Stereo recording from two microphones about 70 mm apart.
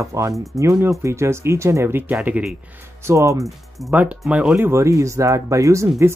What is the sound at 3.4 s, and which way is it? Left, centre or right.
Speech, centre.